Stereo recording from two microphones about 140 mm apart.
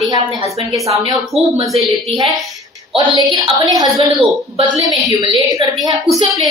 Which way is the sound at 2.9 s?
30° right (ahead or behind).